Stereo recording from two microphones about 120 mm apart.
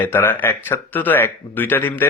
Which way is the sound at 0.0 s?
15° left (ahead or behind).